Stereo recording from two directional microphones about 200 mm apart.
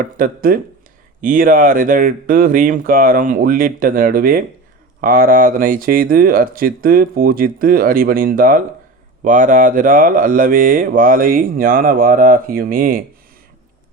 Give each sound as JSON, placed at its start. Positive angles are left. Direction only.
{"t": 0.0, "sound": "speech", "side_deg": -45}